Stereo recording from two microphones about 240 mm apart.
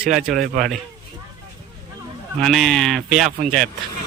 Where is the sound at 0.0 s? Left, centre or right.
Centre.